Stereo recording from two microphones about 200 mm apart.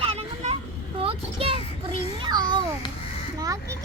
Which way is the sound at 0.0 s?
30° right (ahead or behind).